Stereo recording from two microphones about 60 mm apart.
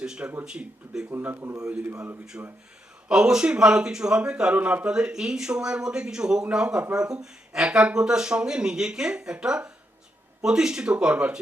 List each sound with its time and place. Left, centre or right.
0.0 s speech: centre
1.2 s speech: right
1.9 s a man's voice: right
3.1 s speech: centre
4.5 s a man's voice: right
4.9 s speech: centre